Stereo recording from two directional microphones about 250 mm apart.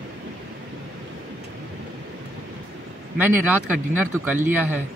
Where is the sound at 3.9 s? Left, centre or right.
Right.